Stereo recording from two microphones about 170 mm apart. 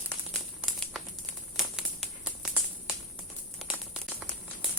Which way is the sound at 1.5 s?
5° right (ahead or behind).